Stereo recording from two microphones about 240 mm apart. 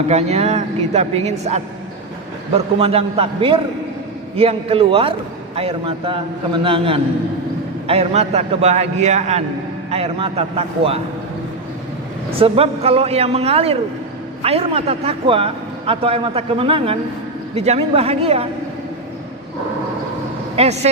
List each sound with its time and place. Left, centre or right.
0.1 s a man's voice: right
12.4 s a man's voice: right
20.6 s a man's voice: right